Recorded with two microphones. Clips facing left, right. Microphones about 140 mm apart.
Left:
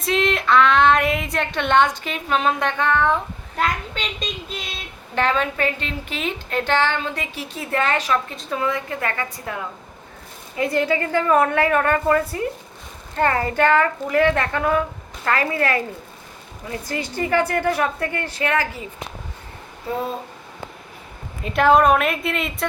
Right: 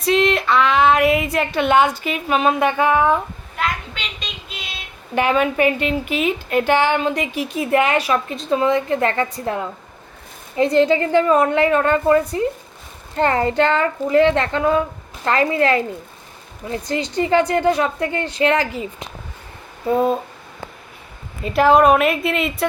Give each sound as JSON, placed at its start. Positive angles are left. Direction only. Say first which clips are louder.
{"t": 0.0, "sound": "a woman's voice", "louder": "right 4 dB", "side_deg": 0}
{"t": 3.6, "sound": "a sound", "louder": "left 1 dB", "side_deg": 45}
{"t": 5.1, "sound": "a woman's voice", "louder": "right 4 dB", "side_deg": -10}
{"t": 21.4, "sound": "speech", "louder": "right 2 dB", "side_deg": 0}